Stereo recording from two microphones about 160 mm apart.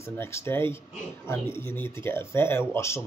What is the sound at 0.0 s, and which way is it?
Speech, 15° left (ahead or behind).